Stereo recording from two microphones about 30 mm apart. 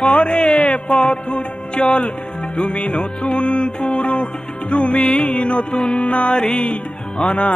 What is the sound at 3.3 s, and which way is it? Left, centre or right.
Music, left.